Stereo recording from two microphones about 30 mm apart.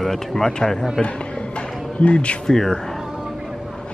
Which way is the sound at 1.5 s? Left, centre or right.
Left.